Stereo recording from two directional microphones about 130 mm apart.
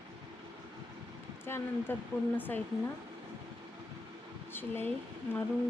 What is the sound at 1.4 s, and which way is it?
Speech, 15° left (ahead or behind).